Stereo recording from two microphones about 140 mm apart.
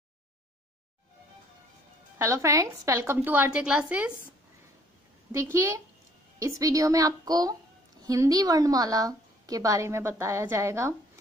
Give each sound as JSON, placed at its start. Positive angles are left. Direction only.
{"t": 2.1, "sound": "a woman's voice", "side_deg": -20}
{"t": 5.3, "sound": "a woman's voice", "side_deg": -20}